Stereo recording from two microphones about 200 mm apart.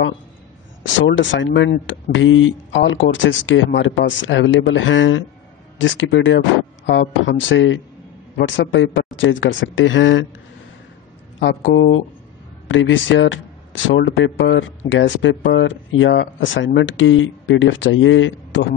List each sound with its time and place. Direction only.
0.9 s speech: 70° left (ahead or behind)
11.3 s speech: 65° left (ahead or behind)